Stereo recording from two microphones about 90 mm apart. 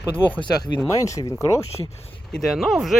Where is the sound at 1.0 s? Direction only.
35° left (ahead or behind).